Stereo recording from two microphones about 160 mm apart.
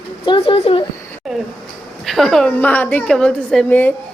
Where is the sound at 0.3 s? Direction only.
35° left (ahead or behind).